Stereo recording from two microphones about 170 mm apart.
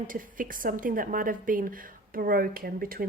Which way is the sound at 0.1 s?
55° right (ahead or behind).